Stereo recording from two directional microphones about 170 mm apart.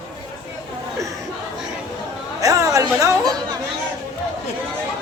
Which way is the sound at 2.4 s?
20° right (ahead or behind).